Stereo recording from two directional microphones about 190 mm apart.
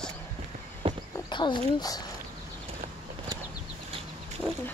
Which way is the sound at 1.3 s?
25° left (ahead or behind).